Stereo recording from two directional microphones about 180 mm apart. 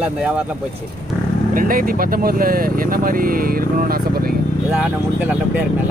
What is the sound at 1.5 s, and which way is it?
Speech, 50° right (ahead or behind).